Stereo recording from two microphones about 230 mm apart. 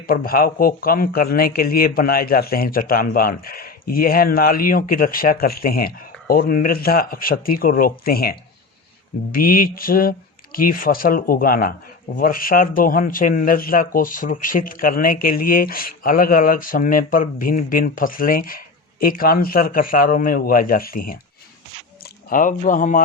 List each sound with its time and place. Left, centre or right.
0.1 s a man's voice: left